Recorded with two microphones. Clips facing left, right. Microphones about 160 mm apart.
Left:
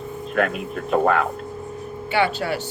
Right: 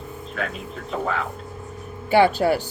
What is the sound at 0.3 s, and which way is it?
Speech, 65° left (ahead or behind).